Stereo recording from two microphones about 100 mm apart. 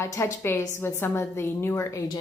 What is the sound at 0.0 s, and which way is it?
A woman's voice, 25° left (ahead or behind).